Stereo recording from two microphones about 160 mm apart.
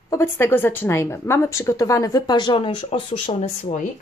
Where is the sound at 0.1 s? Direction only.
15° left (ahead or behind); by 3.7 s 40° left (ahead or behind).